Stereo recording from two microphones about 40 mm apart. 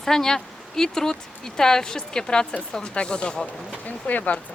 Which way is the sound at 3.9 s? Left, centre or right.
Left.